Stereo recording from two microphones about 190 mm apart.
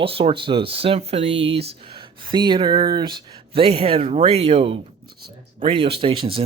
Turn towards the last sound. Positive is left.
turn(degrees=-30)  # may be behind; listen again after turning